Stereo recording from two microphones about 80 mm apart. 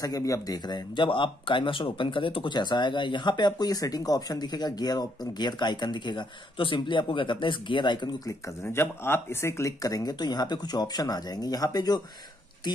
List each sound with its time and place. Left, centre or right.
0.0 s speech: left
0.7 s speech: left
8.6 s speech: left